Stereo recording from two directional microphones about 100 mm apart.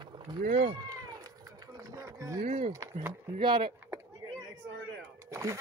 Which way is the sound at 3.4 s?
55° right (ahead or behind).